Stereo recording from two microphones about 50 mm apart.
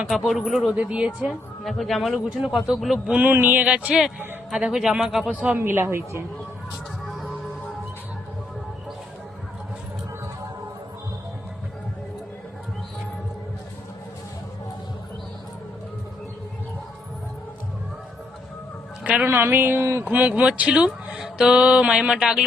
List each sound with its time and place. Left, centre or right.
0.3 s speech: centre
0.7 s speech: right
1.3 s speech: centre
3.3 s a sound: right
3.6 s speech: right
4.5 s speech: centre
5.5 s speech: right
7.0 s music: centre
19.2 s speech: right
20.1 s speech: right; by 22.4 s centre